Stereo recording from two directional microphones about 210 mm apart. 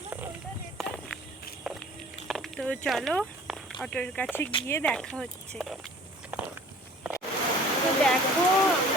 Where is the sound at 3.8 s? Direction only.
5° left (ahead or behind).